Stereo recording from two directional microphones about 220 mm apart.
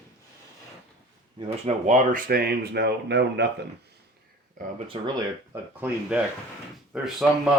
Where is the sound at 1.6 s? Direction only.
35° right (ahead or behind); by 3.7 s 50° right (ahead or behind).